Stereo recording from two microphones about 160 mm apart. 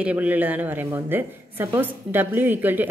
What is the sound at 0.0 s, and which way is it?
A woman's voice, 10° right (ahead or behind).